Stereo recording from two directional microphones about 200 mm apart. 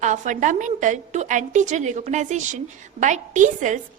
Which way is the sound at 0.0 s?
40° right (ahead or behind).